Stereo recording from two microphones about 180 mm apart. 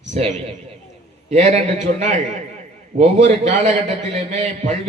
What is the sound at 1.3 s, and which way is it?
A man's voice, 40° right (ahead or behind).